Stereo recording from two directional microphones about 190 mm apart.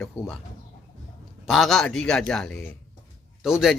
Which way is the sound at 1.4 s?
Centre (ahead or behind).